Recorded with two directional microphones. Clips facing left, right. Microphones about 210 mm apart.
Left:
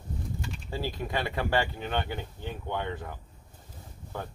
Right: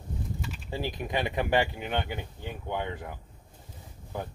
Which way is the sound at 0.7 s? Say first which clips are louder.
Right 1 dB; 15° right (ahead or behind).